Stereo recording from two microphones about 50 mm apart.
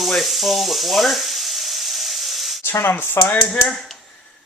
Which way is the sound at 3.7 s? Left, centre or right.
Centre.